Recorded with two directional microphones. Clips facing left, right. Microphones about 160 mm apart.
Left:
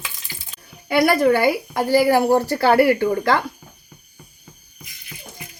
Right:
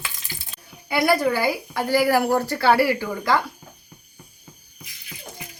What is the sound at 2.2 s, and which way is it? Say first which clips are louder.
Speech: left 3 dB; 35° left (ahead or behind).